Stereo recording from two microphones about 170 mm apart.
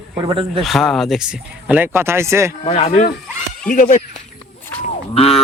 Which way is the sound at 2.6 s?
35° left (ahead or behind).